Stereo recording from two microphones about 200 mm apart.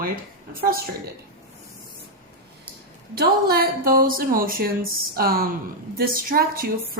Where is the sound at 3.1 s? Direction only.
50° right (ahead or behind).